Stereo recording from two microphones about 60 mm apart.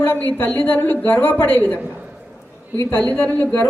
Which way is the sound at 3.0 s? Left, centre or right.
Left.